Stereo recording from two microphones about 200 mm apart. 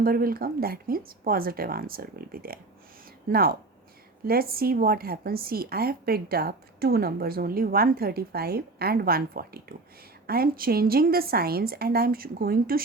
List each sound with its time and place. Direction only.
0.0 s a woman's voice: 45° right (ahead or behind)